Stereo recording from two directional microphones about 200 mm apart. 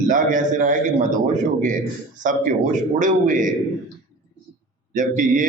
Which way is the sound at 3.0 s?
40° right (ahead or behind).